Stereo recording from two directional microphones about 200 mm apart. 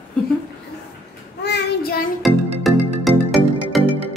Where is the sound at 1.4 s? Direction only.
55° left (ahead or behind).